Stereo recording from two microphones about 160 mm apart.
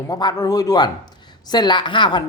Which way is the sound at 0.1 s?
25° left (ahead or behind).